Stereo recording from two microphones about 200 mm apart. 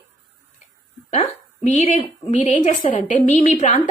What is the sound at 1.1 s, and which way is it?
A woman's voice, 40° left (ahead or behind).